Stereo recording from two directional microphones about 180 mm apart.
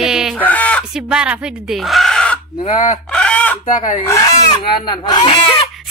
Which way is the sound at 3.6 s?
45° left (ahead or behind).